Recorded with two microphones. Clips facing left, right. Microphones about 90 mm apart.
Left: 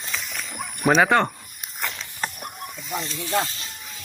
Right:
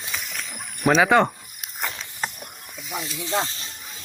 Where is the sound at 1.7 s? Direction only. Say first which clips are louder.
Even; 20° right (ahead or behind).